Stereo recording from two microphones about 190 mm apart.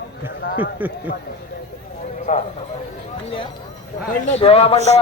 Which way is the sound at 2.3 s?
40° left (ahead or behind).